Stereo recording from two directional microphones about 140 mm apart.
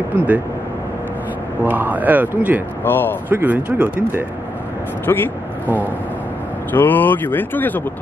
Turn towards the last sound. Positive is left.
turn(degrees=15)  # may be behind; listen again after turning